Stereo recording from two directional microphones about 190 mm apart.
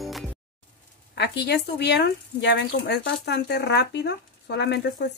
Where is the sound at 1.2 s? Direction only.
60° left (ahead or behind).